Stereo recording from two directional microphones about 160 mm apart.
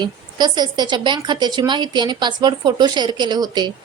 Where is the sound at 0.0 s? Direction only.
25° right (ahead or behind).